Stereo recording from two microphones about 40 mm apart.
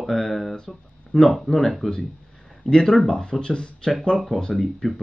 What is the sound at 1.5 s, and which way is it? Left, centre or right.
Speech, centre.